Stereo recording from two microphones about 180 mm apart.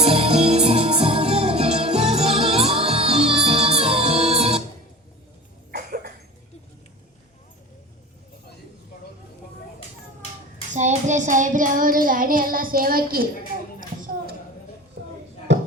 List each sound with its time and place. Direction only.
0.0 s music: 35° right (ahead or behind)
10.8 s child singing: 40° right (ahead or behind)
13.7 s a sound: 50° right (ahead or behind)